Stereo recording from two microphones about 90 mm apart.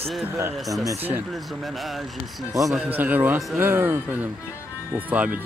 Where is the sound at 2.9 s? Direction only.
20° right (ahead or behind).